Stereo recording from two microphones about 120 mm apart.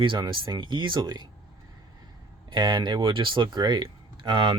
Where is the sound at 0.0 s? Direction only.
45° right (ahead or behind).